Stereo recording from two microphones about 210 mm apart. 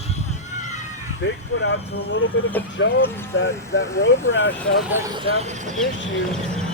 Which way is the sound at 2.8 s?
60° left (ahead or behind).